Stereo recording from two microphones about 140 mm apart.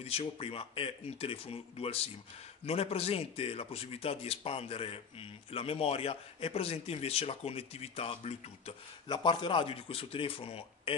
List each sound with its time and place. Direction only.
0.0 s speech: 45° left (ahead or behind)
9.0 s speech: 35° left (ahead or behind)